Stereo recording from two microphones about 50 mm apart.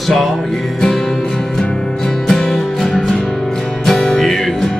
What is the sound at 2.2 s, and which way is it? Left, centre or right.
Music, centre.